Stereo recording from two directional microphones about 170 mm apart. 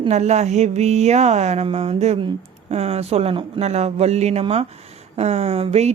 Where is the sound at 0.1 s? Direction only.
40° right (ahead or behind).